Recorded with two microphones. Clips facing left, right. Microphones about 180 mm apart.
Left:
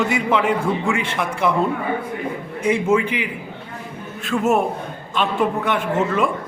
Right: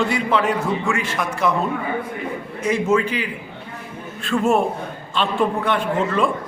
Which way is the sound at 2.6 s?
10° left (ahead or behind).